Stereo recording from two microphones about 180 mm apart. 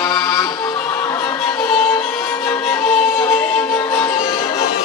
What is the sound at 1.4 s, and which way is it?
Music, 10° left (ahead or behind).